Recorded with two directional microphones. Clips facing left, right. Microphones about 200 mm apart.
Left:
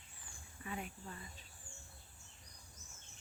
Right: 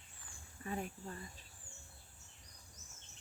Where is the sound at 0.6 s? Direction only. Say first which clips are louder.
Right 4 dB; 40° right (ahead or behind).